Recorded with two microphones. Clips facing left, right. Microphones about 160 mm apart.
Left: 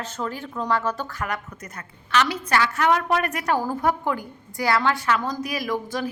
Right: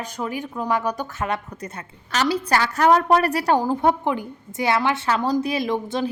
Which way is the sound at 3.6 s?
20° right (ahead or behind).